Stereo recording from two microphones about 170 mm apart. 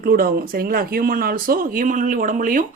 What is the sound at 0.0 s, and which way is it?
Speech, 60° right (ahead or behind).